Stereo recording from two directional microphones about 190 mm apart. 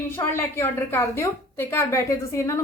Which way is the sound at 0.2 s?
10° left (ahead or behind).